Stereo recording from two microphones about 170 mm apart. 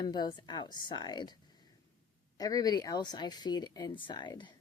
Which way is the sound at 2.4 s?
20° left (ahead or behind).